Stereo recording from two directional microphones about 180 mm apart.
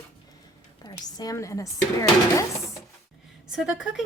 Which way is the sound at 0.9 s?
20° left (ahead or behind).